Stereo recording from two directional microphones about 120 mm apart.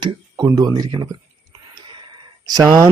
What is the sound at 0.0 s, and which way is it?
Speech, 35° right (ahead or behind).